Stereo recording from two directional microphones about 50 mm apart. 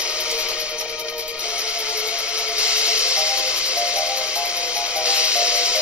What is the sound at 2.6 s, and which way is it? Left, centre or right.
Music, right.